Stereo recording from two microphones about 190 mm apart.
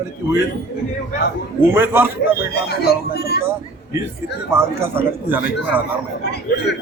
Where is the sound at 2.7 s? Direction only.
55° left (ahead or behind).